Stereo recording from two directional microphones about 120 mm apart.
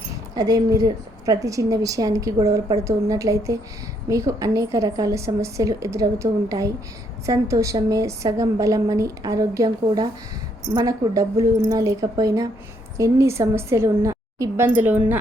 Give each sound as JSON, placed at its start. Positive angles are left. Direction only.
{"t": 0.3, "sound": "a woman's voice", "side_deg": -30}